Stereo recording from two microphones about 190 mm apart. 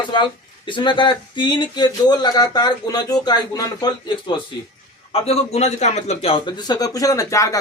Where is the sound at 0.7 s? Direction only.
25° left (ahead or behind).